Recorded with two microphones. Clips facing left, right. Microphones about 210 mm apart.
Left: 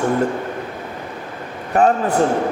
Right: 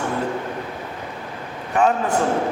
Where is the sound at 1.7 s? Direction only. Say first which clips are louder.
Left 3 dB; 40° left (ahead or behind).